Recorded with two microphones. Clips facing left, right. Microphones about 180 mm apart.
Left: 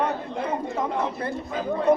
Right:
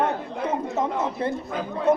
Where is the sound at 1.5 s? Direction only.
Centre (ahead or behind).